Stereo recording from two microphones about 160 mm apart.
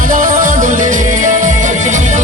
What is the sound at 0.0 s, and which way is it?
Music, 55° right (ahead or behind).